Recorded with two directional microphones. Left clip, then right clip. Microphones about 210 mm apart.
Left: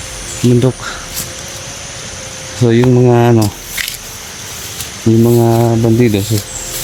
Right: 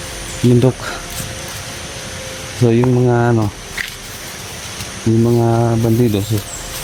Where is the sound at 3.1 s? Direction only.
40° left (ahead or behind).